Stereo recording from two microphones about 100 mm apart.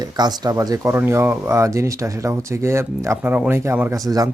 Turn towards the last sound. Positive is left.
turn(degrees=-40)  # may be behind; listen again after turning